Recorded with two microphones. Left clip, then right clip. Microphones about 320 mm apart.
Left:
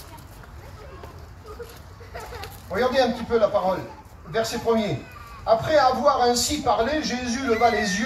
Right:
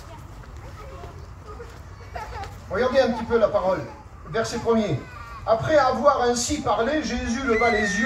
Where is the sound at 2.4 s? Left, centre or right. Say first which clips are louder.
Even; left.